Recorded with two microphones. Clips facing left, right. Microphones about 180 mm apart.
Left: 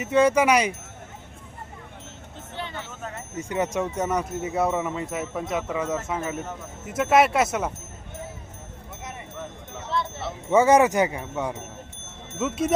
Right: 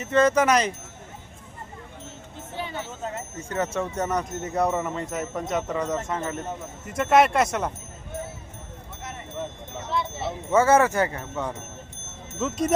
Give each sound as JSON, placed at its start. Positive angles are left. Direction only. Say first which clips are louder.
{"t": 0.0, "sound": "speech", "louder": "left 1 dB", "side_deg": 10}
{"t": 3.3, "sound": "speech", "louder": "left 3 dB", "side_deg": 15}
{"t": 10.5, "sound": "speech", "louder": "left 2 dB", "side_deg": 15}